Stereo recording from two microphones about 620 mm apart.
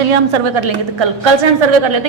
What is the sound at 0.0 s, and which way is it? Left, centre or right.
A woman's voice, right.